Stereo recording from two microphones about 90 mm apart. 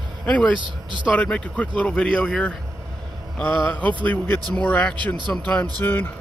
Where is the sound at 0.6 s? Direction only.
60° right (ahead or behind).